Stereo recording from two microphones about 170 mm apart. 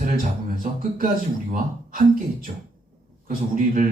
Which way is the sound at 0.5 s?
55° right (ahead or behind).